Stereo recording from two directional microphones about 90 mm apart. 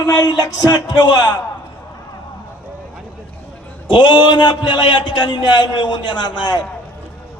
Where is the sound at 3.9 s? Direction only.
65° left (ahead or behind).